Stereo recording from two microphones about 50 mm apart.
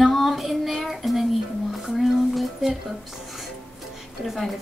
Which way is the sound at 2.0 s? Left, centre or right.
Centre.